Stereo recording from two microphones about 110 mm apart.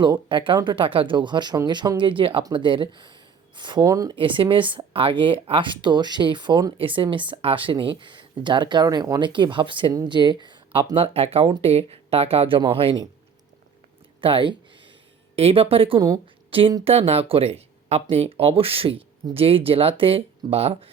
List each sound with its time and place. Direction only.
0.0 s speech: 45° right (ahead or behind)
3.8 s speech: 30° right (ahead or behind)
4.1 s speech: 50° right (ahead or behind)
10.9 s speech: 65° right (ahead or behind)
14.2 s speech: 55° right (ahead or behind)
15.4 s speech: 65° right (ahead or behind)
16.2 s a sound: 55° right (ahead or behind)
16.8 s speech: 65° right (ahead or behind)